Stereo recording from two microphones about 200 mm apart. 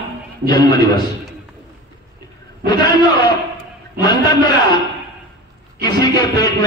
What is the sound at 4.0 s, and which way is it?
Speech, 20° left (ahead or behind).